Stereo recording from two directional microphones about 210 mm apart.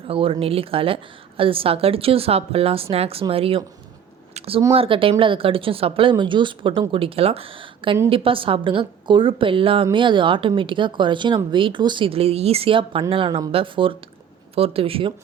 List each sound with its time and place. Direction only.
0.1 s speech: 25° right (ahead or behind)
4.4 s a sound: 25° right (ahead or behind)
4.7 s speech: 25° right (ahead or behind)